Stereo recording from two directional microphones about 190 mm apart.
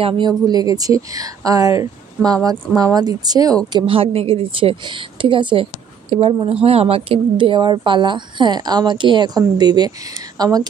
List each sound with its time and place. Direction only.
0.0 s a woman's voice: 20° right (ahead or behind)